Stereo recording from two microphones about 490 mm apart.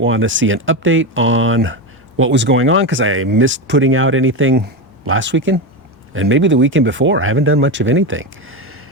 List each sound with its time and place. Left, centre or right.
0.0 s speech: right